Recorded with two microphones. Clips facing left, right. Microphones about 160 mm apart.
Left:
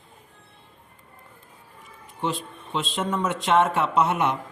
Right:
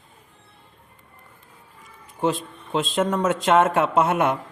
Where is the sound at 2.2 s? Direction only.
45° right (ahead or behind).